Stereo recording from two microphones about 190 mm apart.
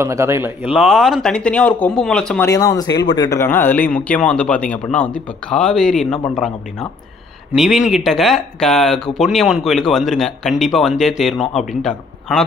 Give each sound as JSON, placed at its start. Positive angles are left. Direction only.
{"t": 0.0, "sound": "speech", "side_deg": -15}
{"t": 0.7, "sound": "speech", "side_deg": 0}
{"t": 2.4, "sound": "speech", "side_deg": 15}